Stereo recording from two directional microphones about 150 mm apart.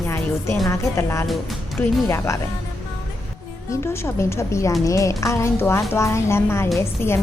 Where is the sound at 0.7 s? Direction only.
15° left (ahead or behind).